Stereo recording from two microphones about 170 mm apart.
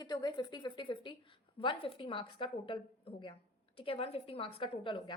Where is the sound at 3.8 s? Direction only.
35° left (ahead or behind).